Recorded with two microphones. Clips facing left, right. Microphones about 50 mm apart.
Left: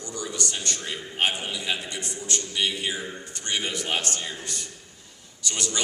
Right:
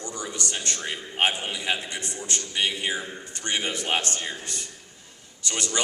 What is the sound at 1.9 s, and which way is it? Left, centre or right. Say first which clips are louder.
Speech: even; right.